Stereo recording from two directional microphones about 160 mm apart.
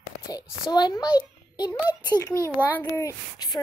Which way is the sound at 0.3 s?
25° left (ahead or behind).